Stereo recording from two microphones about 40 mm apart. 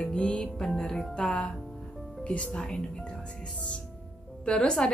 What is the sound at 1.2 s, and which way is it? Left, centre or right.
A woman's voice, left.